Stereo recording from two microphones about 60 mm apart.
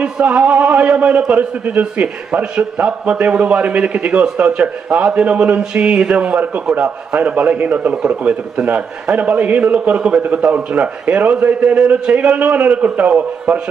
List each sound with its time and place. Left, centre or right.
0.0 s a man's voice: centre
2.4 s a man's voice: centre